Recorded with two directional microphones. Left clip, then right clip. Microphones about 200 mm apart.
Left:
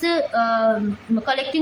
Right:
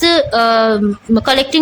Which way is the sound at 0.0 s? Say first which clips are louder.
Right 8 dB; 50° right (ahead or behind).